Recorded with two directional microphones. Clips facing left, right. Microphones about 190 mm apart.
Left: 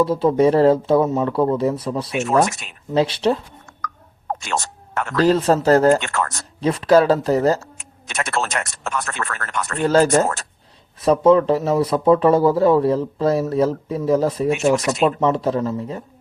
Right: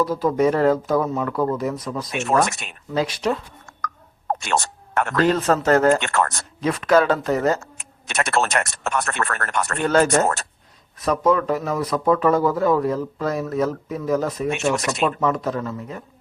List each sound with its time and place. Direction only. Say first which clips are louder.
0.0 s speech: left 3 dB; 30° left (ahead or behind)
2.5 s speech: even; 60° right (ahead or behind)
2.9 s speech: left 4 dB; 30° left (ahead or behind)
3.8 s a sound: right 1 dB; 40° right (ahead or behind)
4.4 s a sound: right 2 dB; 60° right (ahead or behind)
5.1 s speech: left 4 dB; 35° left (ahead or behind)
6.0 s speech: right 2 dB; 60° right (ahead or behind)
6.6 s speech: left 3 dB; 30° left (ahead or behind)
7.8 s speech: right 2 dB; 65° right (ahead or behind)
9.8 s speech: left 3 dB; 30° left (ahead or behind)
14.8 s speech: left 3 dB; centre (ahead or behind)
15.0 s speech: left 3 dB; 30° left (ahead or behind)